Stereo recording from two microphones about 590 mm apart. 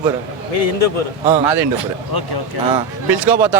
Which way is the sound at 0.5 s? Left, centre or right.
Left.